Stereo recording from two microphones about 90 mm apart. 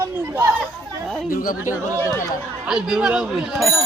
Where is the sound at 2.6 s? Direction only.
10° right (ahead or behind).